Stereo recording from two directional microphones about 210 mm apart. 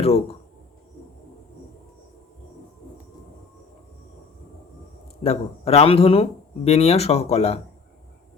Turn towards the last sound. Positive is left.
turn(degrees=30)  # may be behind; listen again after turning